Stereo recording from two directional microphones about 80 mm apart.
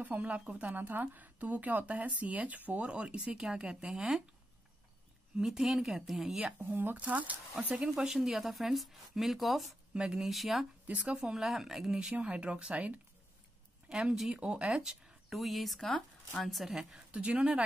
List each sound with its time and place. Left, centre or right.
0.0 s speech: centre
5.4 s speech: centre
6.6 s speech: right
7.7 s speech: centre
10.9 s speech: centre